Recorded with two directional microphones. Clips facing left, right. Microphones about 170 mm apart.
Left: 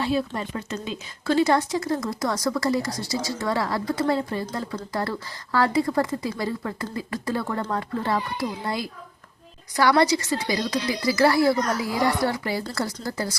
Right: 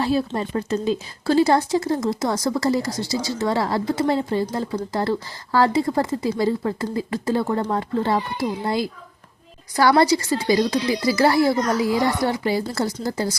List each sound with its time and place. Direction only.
0.3 s speech: 35° right (ahead or behind)